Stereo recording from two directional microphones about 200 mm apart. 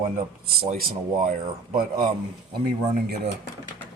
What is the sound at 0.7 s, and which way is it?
Speech, 45° right (ahead or behind).